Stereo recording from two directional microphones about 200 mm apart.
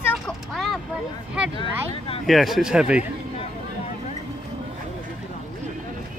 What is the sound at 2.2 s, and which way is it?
Speech, centre (ahead or behind).